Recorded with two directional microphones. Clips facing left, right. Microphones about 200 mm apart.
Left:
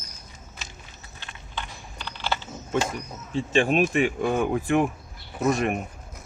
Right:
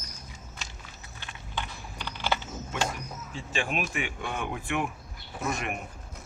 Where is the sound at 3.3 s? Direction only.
35° left (ahead or behind).